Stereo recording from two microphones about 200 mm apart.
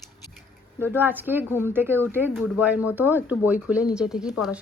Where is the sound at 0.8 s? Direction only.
10° right (ahead or behind).